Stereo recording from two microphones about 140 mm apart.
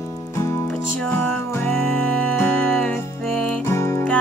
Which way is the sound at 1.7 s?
10° left (ahead or behind).